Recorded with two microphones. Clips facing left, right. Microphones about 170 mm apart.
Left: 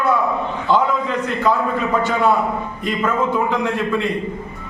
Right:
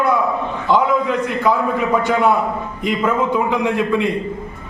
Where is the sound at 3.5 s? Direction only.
15° right (ahead or behind).